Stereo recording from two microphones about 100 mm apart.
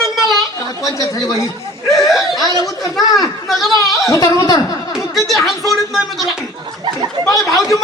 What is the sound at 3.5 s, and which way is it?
Speech, centre (ahead or behind).